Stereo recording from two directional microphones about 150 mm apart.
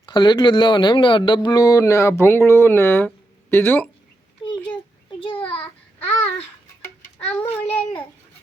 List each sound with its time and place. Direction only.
0.0 s a man's voice: 30° left (ahead or behind); by 3.8 s 15° left (ahead or behind)
5.2 s a sound: 35° left (ahead or behind)
7.3 s babbling: 10° left (ahead or behind)